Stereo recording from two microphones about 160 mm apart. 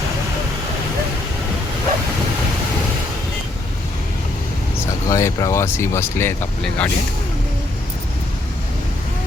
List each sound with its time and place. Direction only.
5.0 s speech: 20° left (ahead or behind)